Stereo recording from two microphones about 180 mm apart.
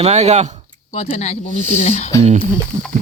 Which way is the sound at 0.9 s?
35° left (ahead or behind).